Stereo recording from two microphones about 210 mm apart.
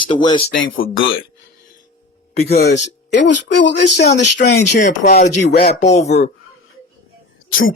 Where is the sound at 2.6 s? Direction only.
55° left (ahead or behind).